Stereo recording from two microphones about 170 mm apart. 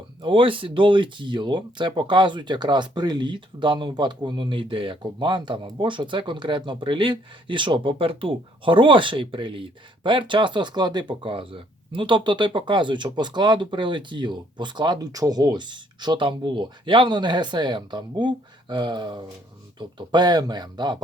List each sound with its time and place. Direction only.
0.2 s speech: 30° right (ahead or behind)